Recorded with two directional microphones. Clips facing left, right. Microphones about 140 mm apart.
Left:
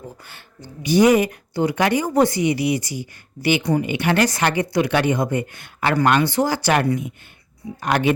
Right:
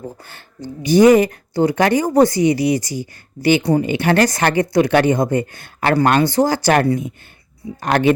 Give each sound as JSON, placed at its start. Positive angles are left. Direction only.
{"t": 0.3, "sound": "speech", "side_deg": -45}
{"t": 7.8, "sound": "speech", "side_deg": -45}